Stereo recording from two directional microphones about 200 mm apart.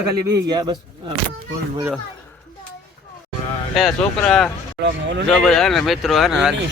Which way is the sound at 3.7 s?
Centre (ahead or behind).